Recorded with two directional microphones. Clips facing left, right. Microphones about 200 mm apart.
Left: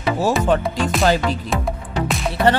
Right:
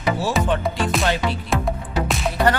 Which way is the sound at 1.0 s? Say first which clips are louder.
Left 4 dB; 40° left (ahead or behind).